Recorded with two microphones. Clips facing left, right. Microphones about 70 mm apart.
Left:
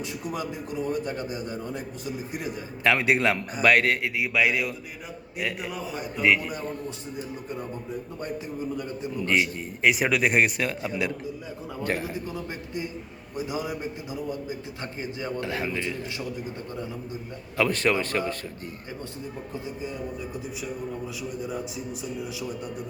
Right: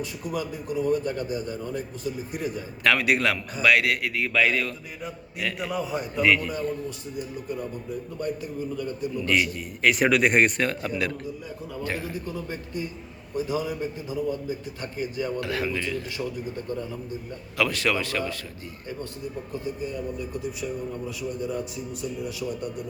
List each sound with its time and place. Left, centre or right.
0.0 s a man's voice: left
3.6 s a man's voice: left
3.9 s a man's voice: left
5.5 s a man's voice: centre
6.2 s a man's voice: left
8.2 s a man's voice: left
9.8 s a man's voice: centre; by 16.2 s left
17.6 s a man's voice: left